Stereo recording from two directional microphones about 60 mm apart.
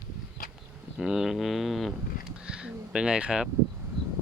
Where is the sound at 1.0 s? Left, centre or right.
Centre.